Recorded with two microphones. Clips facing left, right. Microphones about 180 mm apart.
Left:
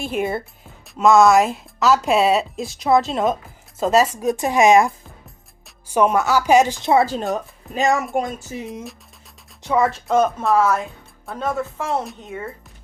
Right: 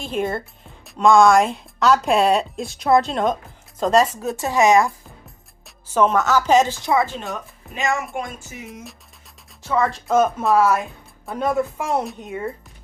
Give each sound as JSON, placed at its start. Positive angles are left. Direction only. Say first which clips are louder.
{"t": 0.0, "sound": "speech", "louder": "left 1 dB", "side_deg": 10}
{"t": 4.2, "sound": "speech", "louder": "left 2 dB", "side_deg": 15}
{"t": 5.9, "sound": "speech", "louder": "even", "side_deg": 10}
{"t": 6.8, "sound": "speech", "louder": "left 4 dB", "side_deg": 30}
{"t": 9.6, "sound": "speech", "louder": "left 2 dB", "side_deg": 10}